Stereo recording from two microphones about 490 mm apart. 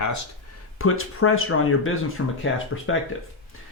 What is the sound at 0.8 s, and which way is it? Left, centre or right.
Speech, left.